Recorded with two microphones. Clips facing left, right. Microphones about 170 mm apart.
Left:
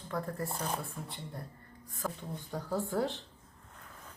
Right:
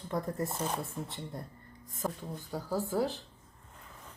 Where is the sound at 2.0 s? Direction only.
20° right (ahead or behind).